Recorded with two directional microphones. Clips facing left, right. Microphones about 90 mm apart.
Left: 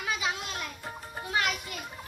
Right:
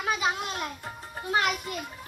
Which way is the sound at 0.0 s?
40° right (ahead or behind).